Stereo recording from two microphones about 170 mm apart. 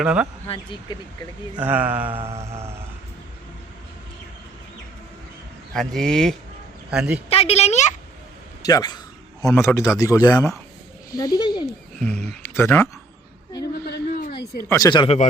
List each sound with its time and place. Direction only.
0.0 s speech: 5° right (ahead or behind)
0.4 s a woman's voice: 30° left (ahead or behind)
1.5 s speech: 10° right (ahead or behind)
2.1 s a sound: 35° right (ahead or behind)
5.7 s a man's voice: centre (ahead or behind)
7.3 s a woman's voice: 35° left (ahead or behind)
8.6 s speech: 25° left (ahead or behind)
11.9 s speech: 5° left (ahead or behind)
13.8 s a sound: 60° left (ahead or behind)
14.7 s speech: 25° left (ahead or behind)